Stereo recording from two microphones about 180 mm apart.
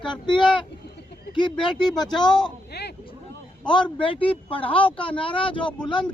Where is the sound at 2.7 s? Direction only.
70° left (ahead or behind).